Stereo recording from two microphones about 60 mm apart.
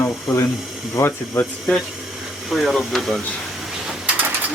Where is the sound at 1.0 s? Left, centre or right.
Left.